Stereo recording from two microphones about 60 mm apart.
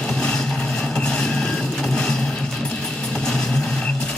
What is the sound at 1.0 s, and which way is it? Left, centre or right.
Vehicle, centre.